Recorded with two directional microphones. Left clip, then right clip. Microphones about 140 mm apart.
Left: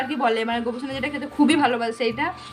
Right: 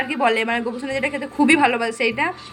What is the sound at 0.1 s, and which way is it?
A woman's voice, 25° right (ahead or behind).